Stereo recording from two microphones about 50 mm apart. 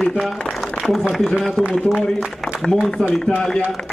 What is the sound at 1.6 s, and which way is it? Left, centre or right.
A man's voice, centre.